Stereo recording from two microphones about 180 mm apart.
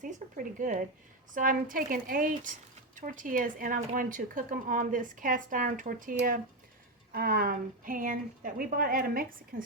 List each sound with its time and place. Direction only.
0.0 s speech: 45° right (ahead or behind)